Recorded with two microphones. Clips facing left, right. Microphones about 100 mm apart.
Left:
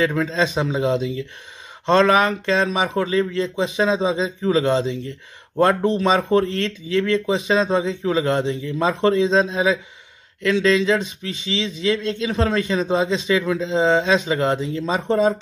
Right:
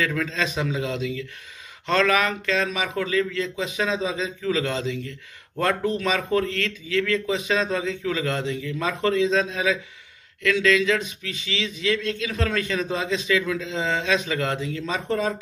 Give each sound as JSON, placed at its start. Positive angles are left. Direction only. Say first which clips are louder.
{"t": 0.0, "sound": "speech", "louder": "left 6 dB", "side_deg": 30}